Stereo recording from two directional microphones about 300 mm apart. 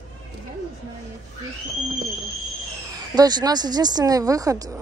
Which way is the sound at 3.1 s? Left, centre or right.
Centre.